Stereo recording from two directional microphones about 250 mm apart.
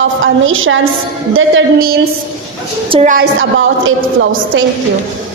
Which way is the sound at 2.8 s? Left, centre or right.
Right.